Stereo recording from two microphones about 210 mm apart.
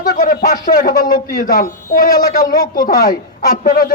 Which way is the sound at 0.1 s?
45° left (ahead or behind).